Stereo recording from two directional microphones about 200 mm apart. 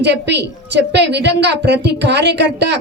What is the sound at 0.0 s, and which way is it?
A woman's voice, 60° right (ahead or behind).